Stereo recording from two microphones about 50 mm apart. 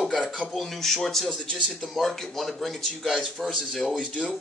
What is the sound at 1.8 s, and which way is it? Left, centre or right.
A man's voice, centre.